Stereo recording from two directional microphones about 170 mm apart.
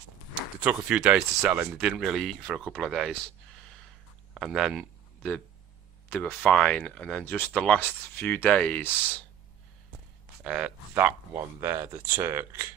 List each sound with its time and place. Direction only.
0.6 s speech: 5° right (ahead or behind)
4.4 s speech: centre (ahead or behind)
10.4 s speech: 5° right (ahead or behind)